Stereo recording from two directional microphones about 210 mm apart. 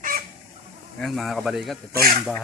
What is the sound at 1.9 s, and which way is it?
Speech, 45° right (ahead or behind).